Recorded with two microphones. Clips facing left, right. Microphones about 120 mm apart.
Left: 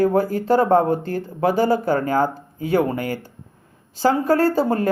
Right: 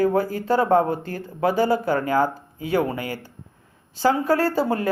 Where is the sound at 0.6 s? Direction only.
35° left (ahead or behind).